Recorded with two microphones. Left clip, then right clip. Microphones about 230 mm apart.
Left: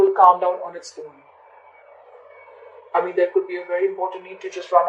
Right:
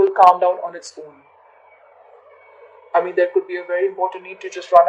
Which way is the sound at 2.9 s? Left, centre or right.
Right.